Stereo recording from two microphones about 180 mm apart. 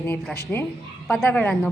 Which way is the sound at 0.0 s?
10° left (ahead or behind).